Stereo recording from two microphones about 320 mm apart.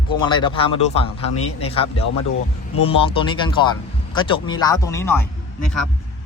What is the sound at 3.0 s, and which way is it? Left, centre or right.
A man's voice, centre.